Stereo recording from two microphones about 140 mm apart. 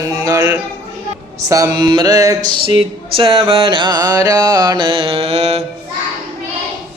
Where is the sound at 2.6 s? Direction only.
40° right (ahead or behind).